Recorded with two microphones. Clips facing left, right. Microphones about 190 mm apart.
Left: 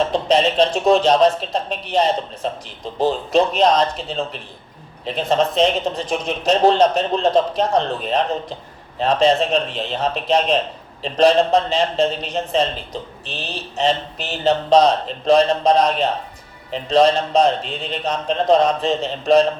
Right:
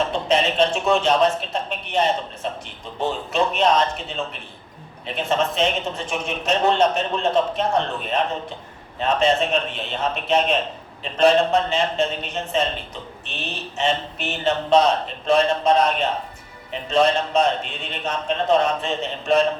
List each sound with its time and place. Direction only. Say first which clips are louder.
0.1 s a man's voice: left 4 dB; 35° left (ahead or behind)